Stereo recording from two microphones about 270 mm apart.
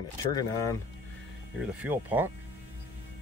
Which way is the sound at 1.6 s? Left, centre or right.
Centre.